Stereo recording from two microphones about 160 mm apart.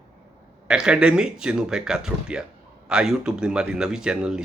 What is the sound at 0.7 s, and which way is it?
Speech, 5° right (ahead or behind).